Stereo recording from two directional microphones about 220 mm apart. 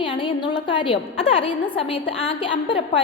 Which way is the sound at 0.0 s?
20° left (ahead or behind).